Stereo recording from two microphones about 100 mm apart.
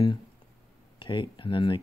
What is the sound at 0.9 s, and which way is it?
Speech, 55° left (ahead or behind).